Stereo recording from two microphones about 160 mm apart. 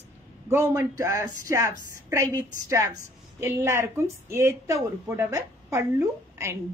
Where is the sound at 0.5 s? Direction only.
15° right (ahead or behind).